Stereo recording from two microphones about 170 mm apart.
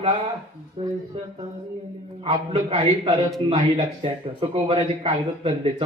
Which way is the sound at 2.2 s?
35° right (ahead or behind).